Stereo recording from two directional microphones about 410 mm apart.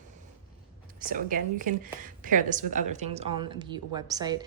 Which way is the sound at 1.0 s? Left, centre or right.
Centre.